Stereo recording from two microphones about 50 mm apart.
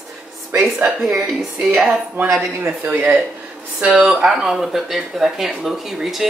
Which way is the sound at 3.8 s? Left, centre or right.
Centre.